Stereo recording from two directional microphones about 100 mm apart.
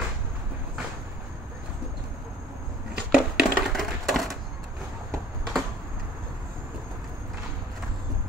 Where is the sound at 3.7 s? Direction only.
Centre (ahead or behind).